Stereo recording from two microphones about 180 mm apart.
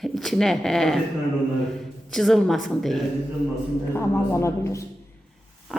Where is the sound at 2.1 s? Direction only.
Centre (ahead or behind).